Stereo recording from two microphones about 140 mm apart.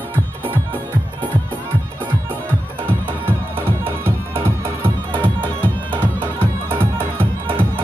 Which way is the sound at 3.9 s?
15° right (ahead or behind).